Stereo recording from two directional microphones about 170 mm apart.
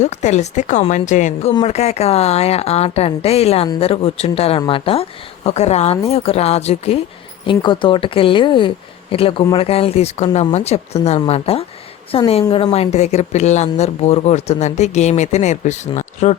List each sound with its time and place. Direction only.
0.0 s speech: 45° left (ahead or behind)